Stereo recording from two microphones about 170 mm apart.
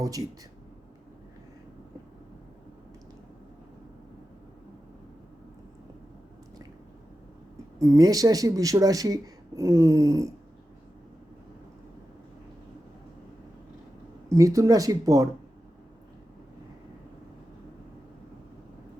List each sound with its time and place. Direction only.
0.0 s speech: 20° right (ahead or behind)
7.8 s speech: 20° right (ahead or behind)
14.3 s speech: 20° right (ahead or behind)